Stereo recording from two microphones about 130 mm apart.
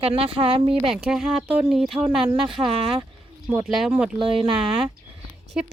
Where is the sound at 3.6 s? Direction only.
Centre (ahead or behind).